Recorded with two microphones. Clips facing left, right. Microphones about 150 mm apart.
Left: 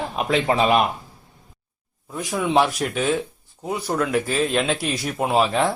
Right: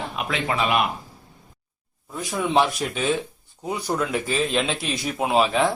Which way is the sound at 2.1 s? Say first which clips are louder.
Left 1 dB; 5° left (ahead or behind).